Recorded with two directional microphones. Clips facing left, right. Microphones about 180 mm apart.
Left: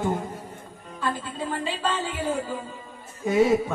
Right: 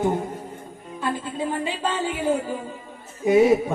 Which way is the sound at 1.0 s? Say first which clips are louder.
Right 3 dB; 15° right (ahead or behind).